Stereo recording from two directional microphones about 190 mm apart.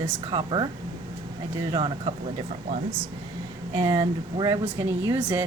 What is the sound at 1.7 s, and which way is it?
Speech, 25° right (ahead or behind).